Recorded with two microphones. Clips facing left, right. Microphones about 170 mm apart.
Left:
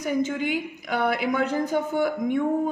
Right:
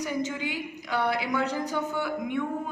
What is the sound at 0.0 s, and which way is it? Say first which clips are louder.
A woman's voice: left 5 dB; 55° left (ahead or behind).